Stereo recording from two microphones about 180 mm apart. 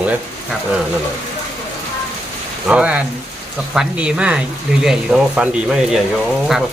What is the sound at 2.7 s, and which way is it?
Speech, 5° right (ahead or behind).